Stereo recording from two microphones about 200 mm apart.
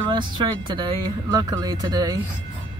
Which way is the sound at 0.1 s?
25° right (ahead or behind).